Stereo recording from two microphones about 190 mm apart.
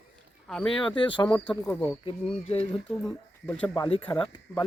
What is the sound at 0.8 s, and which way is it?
Speech, 25° left (ahead or behind).